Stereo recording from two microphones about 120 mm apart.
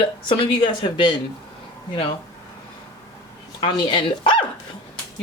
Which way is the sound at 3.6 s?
45° left (ahead or behind).